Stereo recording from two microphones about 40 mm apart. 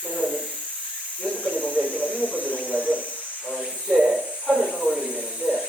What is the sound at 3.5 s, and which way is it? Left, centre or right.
Hiss, centre.